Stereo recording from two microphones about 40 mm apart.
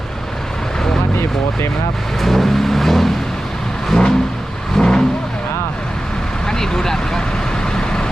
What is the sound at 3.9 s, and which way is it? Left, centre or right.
Vehicle, centre.